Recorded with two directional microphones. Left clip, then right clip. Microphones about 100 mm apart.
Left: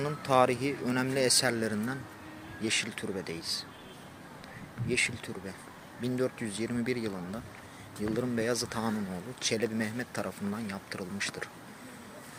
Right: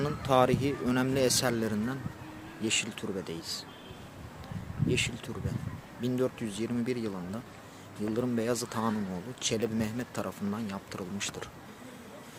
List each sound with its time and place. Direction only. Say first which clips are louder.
0.2 s speech: even; 20° right (ahead or behind); by 3.4 s 5° right (ahead or behind)
4.9 s speech: left 1 dB; 10° right (ahead or behind)
8.1 s speech: even; 5° right (ahead or behind)